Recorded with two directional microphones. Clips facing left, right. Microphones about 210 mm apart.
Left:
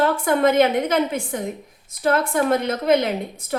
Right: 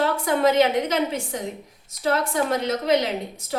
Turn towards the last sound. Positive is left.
turn(degrees=55)  # may be behind; listen again after turning